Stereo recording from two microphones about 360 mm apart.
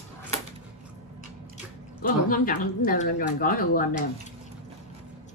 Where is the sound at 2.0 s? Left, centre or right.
Left.